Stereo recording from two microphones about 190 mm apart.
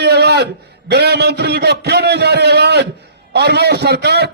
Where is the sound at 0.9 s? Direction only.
60° right (ahead or behind).